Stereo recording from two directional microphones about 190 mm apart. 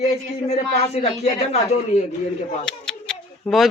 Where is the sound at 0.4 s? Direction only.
35° left (ahead or behind).